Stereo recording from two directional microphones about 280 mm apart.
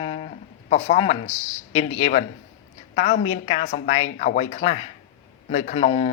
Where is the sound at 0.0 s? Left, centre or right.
Centre.